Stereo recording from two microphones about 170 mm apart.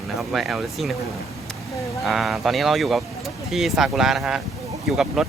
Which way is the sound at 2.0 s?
Centre (ahead or behind).